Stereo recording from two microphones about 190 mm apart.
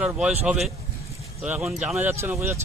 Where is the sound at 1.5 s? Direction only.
5° right (ahead or behind).